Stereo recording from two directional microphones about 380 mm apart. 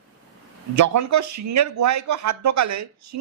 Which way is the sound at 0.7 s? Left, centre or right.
Right.